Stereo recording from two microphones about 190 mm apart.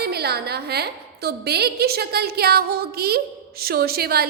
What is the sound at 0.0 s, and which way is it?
A woman's voice, 55° right (ahead or behind).